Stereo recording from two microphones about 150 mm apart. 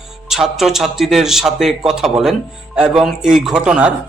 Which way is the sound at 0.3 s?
Centre (ahead or behind).